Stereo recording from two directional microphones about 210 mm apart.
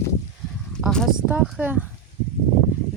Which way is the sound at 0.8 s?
Centre (ahead or behind).